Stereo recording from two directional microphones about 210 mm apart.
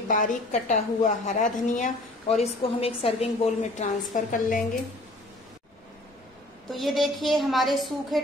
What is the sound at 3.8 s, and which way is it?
Speech, 40° left (ahead or behind).